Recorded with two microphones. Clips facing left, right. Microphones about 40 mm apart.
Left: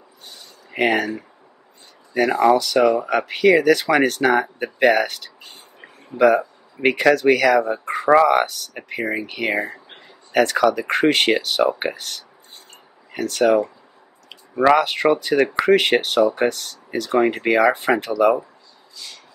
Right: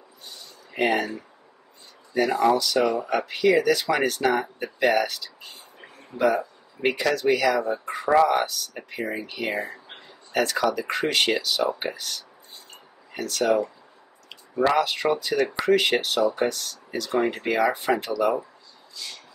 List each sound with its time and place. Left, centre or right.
0.7 s speech: left
9.5 s speech: left
14.8 s speech: left